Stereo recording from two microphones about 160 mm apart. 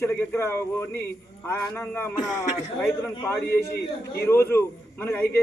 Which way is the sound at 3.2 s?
15° left (ahead or behind).